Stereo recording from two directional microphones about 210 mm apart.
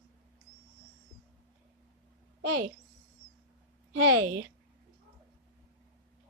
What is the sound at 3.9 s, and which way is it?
Speech, 90° right.